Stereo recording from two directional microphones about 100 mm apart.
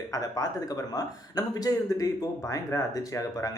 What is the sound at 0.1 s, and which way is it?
Speech, 40° left (ahead or behind).